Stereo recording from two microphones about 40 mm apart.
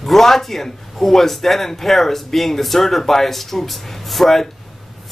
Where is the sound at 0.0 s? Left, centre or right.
Centre.